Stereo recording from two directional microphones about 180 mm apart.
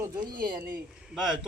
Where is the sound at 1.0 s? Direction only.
Centre (ahead or behind).